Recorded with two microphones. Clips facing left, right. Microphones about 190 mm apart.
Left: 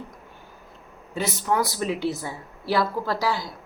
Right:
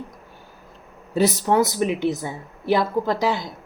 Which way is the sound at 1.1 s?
35° right (ahead or behind).